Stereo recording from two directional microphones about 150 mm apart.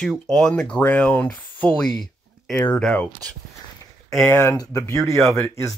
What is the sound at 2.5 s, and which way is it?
Speech, 10° left (ahead or behind).